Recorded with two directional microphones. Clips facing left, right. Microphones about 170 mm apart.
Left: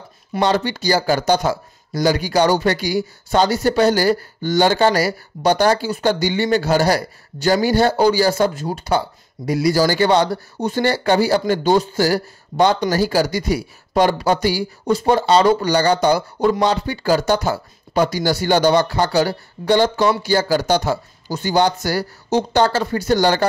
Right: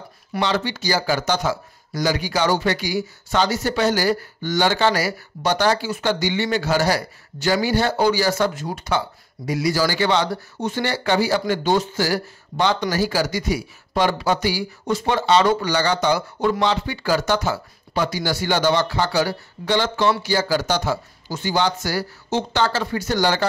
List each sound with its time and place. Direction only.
0.4 s speech: 45° left (ahead or behind)
5.9 s speech: 35° left (ahead or behind)
14.0 s speech: 40° left (ahead or behind)
17.5 s speech: 50° left (ahead or behind)